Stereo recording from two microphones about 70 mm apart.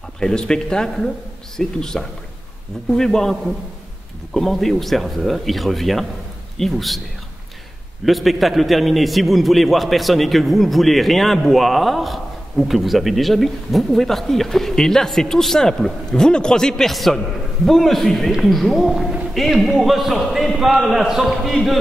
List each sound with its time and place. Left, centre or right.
0.2 s a man's voice: centre
8.0 s a man's voice: centre